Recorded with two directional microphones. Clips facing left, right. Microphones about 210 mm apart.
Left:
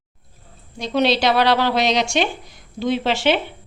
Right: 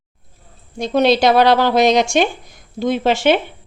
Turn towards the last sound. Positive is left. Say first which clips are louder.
# right 4 dB
turn(degrees=-50)  # may be behind; listen again after turning